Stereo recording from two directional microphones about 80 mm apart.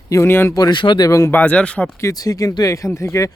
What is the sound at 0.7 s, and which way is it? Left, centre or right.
Speech, left.